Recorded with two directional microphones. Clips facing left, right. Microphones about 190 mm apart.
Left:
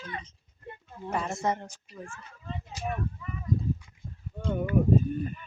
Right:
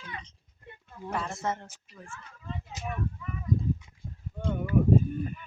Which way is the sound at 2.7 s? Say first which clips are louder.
Left 5 dB; 20° right (ahead or behind).